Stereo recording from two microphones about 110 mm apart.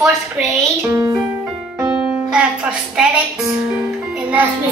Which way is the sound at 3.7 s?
10° right (ahead or behind).